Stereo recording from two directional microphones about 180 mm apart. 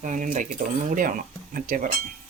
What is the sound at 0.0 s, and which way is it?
Speech, 45° right (ahead or behind).